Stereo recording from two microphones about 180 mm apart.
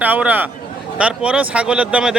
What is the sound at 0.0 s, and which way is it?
A man's voice, 10° right (ahead or behind).